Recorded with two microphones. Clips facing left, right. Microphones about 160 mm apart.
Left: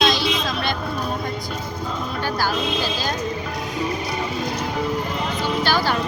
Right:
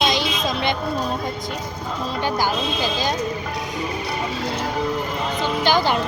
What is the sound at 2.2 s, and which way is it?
Speech, 15° right (ahead or behind).